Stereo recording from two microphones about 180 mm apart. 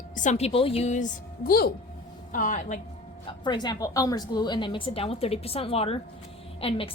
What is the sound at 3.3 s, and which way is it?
A woman's voice, 25° left (ahead or behind).